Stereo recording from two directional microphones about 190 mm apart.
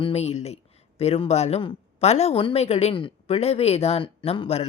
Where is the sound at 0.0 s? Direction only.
35° left (ahead or behind).